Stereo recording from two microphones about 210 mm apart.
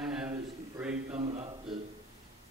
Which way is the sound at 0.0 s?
5° right (ahead or behind).